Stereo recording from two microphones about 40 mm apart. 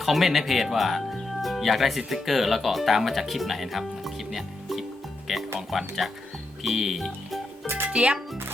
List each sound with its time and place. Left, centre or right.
0.0 s speech: centre
6.6 s music: centre
7.9 s speech: right